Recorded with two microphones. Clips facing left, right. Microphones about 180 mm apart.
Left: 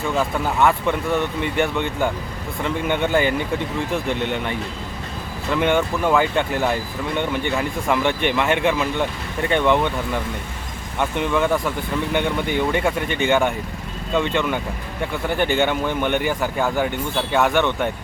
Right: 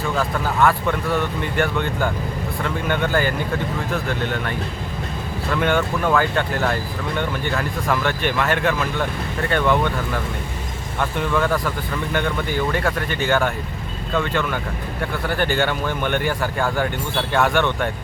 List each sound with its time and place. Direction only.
0.2 s speech: 20° left (ahead or behind)
11.0 s speech: 10° left (ahead or behind)
12.1 s speech: 20° left (ahead or behind); by 17.5 s 5° left (ahead or behind)
17.5 s speech: 15° left (ahead or behind)